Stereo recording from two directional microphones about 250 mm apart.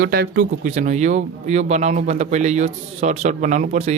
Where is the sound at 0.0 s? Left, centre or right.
Right.